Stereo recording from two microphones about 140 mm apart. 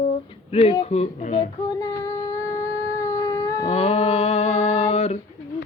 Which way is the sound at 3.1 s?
25° left (ahead or behind).